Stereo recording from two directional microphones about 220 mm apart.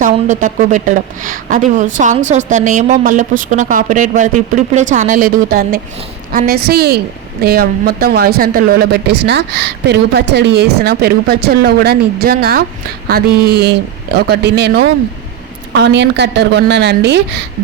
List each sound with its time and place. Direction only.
0.0 s a woman's voice: 35° right (ahead or behind); by 17.4 s 50° right (ahead or behind)